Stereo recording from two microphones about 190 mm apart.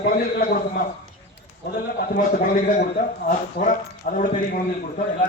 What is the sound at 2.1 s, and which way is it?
A man's voice, 45° left (ahead or behind).